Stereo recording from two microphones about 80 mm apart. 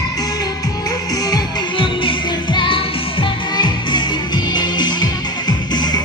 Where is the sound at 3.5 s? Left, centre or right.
Left.